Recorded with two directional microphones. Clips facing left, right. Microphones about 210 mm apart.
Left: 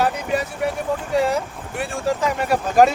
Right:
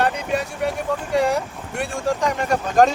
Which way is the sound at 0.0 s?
Centre (ahead or behind).